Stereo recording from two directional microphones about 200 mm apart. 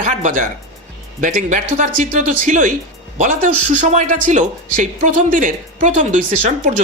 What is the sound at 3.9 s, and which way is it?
Speech, 35° right (ahead or behind).